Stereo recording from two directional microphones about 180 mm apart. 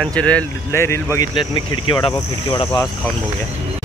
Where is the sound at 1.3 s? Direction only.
25° left (ahead or behind).